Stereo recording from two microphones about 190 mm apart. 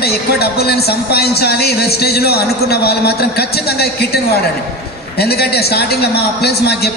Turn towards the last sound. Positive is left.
turn(degrees=60)  # may be behind; listen again after turning